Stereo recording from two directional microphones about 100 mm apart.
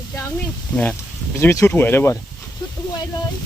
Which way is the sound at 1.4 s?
30° left (ahead or behind).